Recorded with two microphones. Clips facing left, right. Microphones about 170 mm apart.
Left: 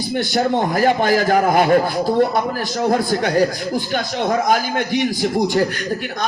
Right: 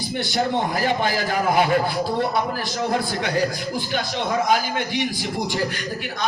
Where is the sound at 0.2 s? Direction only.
45° left (ahead or behind).